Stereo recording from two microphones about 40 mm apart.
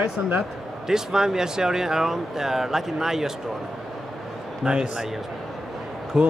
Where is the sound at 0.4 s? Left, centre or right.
Centre.